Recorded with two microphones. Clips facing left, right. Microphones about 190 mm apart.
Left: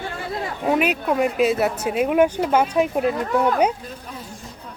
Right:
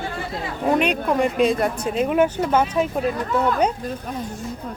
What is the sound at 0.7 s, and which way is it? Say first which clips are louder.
Speech: right 1 dB; 5° left (ahead or behind).